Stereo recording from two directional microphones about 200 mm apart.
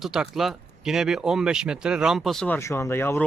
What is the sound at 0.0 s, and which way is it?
Speech, centre (ahead or behind).